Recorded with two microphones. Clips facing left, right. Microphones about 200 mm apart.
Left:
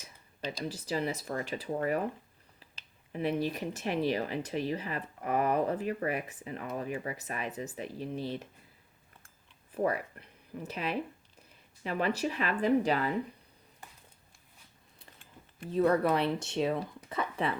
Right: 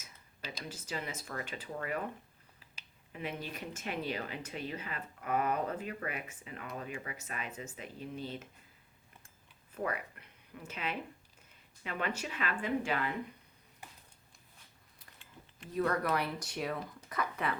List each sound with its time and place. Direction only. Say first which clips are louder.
0.5 s speech: left 7 dB; 35° left (ahead or behind)
3.1 s speech: left 10 dB; 35° left (ahead or behind)
9.7 s speech: left 7 dB; 35° left (ahead or behind)
15.7 s a woman's voice: left 6 dB; 25° left (ahead or behind)